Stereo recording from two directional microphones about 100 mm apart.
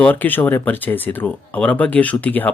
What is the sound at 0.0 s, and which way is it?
Speech, 15° left (ahead or behind).